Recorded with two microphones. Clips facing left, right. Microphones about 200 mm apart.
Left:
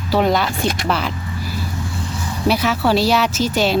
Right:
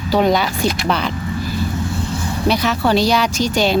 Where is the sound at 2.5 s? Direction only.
5° left (ahead or behind).